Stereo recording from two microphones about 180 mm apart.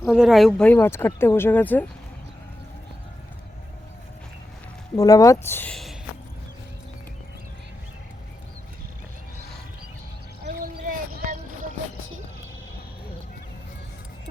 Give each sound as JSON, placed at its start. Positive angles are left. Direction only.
{"t": 0.0, "sound": "speech", "side_deg": 0}
{"t": 4.9, "sound": "speech", "side_deg": 20}
{"t": 10.4, "sound": "a sound", "side_deg": -55}